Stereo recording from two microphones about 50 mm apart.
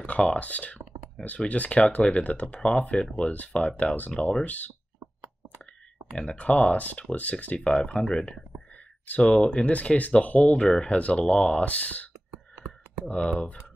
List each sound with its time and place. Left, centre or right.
0.0 s speech: left
6.1 s speech: left
13.1 s speech: left